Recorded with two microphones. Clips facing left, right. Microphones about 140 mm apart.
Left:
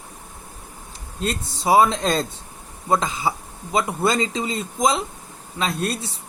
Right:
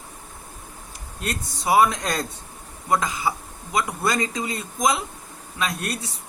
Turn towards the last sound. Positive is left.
turn(degrees=30)  # may be behind; listen again after turning